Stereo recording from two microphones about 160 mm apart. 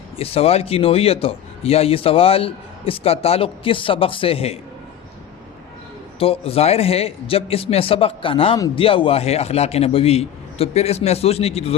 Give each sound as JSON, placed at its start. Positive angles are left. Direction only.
{"t": 0.2, "sound": "speech", "side_deg": 35}
{"t": 6.1, "sound": "speech", "side_deg": 35}
{"t": 8.5, "sound": "a man's voice", "side_deg": 20}
{"t": 8.8, "sound": "speech", "side_deg": 35}